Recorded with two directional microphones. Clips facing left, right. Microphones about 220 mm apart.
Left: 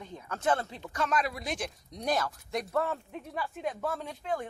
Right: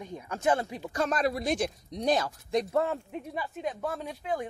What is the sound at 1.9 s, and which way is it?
Speech, 20° right (ahead or behind).